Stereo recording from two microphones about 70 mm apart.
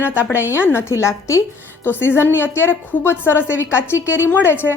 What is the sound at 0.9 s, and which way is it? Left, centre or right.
Speech, left.